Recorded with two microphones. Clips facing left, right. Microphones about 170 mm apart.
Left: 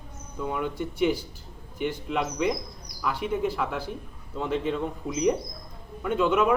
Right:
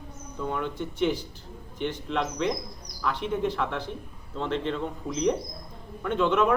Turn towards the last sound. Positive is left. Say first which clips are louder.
# left 1 dB
turn(degrees=5)  # may be behind; listen again after turning